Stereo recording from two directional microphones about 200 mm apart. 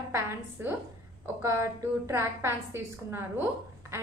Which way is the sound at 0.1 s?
10° right (ahead or behind).